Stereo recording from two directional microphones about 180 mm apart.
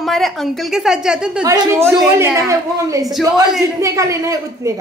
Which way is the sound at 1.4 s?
20° right (ahead or behind).